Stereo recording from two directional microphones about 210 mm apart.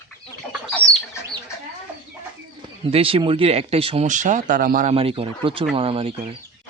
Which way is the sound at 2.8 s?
25° right (ahead or behind).